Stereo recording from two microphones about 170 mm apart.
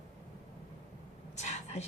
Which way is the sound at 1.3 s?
40° left (ahead or behind).